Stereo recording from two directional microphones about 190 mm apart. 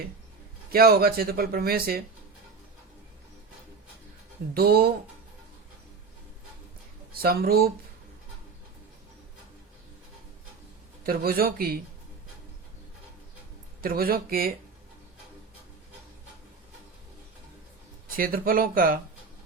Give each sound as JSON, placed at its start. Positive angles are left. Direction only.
{"t": 0.7, "sound": "speech", "side_deg": -55}
{"t": 4.5, "sound": "speech", "side_deg": -55}
{"t": 7.1, "sound": "speech", "side_deg": -55}
{"t": 11.0, "sound": "speech", "side_deg": -50}
{"t": 13.8, "sound": "speech", "side_deg": -50}
{"t": 18.2, "sound": "speech", "side_deg": -50}